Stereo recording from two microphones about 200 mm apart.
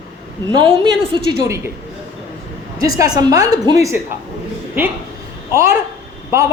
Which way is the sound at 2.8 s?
20° right (ahead or behind).